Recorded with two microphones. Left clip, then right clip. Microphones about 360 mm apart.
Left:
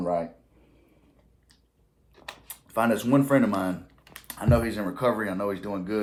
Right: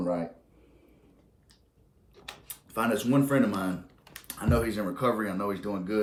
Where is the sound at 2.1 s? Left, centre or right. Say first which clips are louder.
Left 2 dB; centre.